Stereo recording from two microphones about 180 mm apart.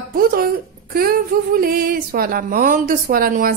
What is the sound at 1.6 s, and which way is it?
A woman's voice, 55° right (ahead or behind).